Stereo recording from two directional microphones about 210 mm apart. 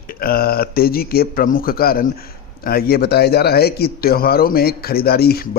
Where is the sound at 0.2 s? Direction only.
45° left (ahead or behind).